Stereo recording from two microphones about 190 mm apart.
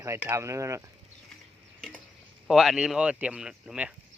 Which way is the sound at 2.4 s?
Centre (ahead or behind).